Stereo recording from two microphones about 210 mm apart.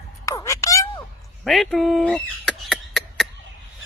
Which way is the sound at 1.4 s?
Centre (ahead or behind).